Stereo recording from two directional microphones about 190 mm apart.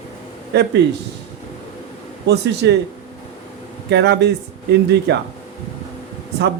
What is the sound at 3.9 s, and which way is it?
Speech, 60° right (ahead or behind).